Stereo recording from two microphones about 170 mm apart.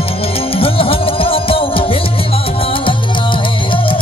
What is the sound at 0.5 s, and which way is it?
Music, 35° left (ahead or behind).